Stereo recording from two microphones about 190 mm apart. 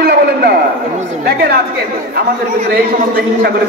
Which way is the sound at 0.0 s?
55° right (ahead or behind).